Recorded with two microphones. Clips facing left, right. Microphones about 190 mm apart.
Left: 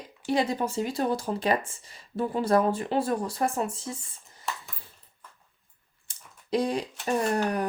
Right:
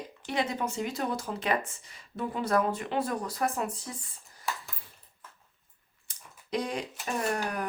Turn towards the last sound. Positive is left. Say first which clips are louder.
# left 5 dB
turn(degrees=35)  # may be behind; listen again after turning